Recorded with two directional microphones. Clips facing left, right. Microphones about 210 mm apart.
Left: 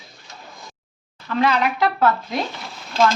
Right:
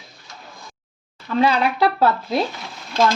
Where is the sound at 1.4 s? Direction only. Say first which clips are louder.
Right 1 dB; 30° right (ahead or behind).